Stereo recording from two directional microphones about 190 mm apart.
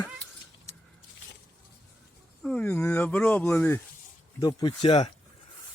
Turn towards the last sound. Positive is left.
turn(degrees=25)  # may be behind; listen again after turning